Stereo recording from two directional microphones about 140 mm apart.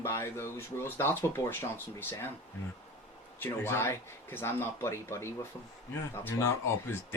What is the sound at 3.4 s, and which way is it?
Speech, 15° left (ahead or behind).